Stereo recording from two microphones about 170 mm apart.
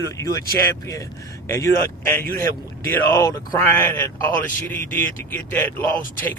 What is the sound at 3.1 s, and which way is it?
A man's voice, 20° left (ahead or behind).